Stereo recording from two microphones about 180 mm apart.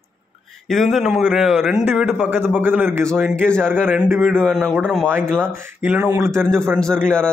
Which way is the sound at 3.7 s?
10° right (ahead or behind).